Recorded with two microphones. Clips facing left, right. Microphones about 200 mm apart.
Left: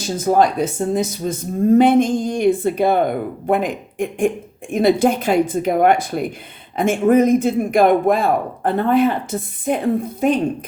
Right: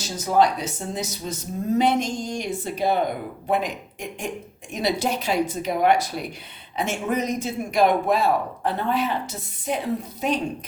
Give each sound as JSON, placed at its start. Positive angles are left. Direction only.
{"t": 0.2, "sound": "speech", "side_deg": 50}